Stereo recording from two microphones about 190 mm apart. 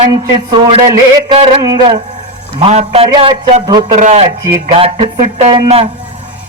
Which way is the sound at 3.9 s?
35° right (ahead or behind).